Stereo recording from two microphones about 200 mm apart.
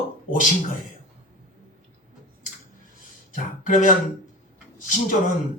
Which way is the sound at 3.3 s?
40° left (ahead or behind).